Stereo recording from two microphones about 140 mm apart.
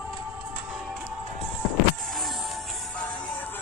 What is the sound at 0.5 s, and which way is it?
Music, 10° right (ahead or behind).